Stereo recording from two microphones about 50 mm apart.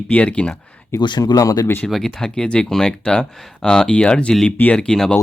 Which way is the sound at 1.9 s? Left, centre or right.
Centre.